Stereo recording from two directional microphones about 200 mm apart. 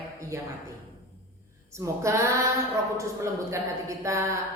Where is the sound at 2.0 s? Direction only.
15° right (ahead or behind).